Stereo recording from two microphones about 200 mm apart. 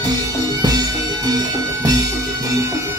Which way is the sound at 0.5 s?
20° right (ahead or behind).